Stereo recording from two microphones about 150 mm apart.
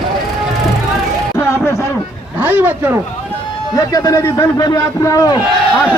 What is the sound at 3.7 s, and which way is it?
A man's voice, 25° left (ahead or behind).